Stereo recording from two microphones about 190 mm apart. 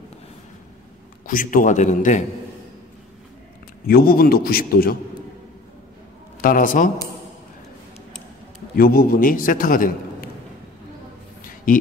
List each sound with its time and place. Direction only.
1.2 s a man's voice: 45° left (ahead or behind)
3.8 s a man's voice: 50° left (ahead or behind)
6.4 s a man's voice: 45° left (ahead or behind)
8.7 s a man's voice: 50° left (ahead or behind)
11.4 s a sound: 45° left (ahead or behind)